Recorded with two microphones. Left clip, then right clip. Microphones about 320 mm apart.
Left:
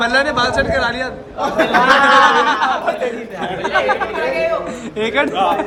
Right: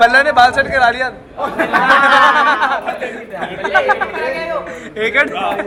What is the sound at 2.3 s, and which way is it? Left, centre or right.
Speech, centre.